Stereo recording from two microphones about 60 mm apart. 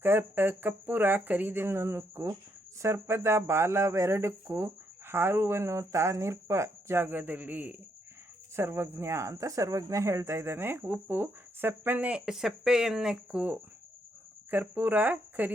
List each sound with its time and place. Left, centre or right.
0.0 s speech: right
8.5 s speech: right
12.0 s speech: centre
14.5 s speech: right